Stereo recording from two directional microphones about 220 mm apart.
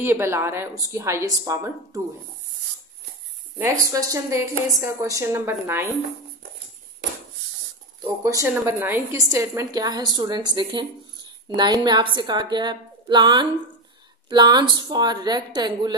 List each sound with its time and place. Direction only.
0.0 s a woman's voice: 10° right (ahead or behind)
3.5 s a woman's voice: 15° right (ahead or behind)
8.2 s a woman's voice: 15° right (ahead or behind)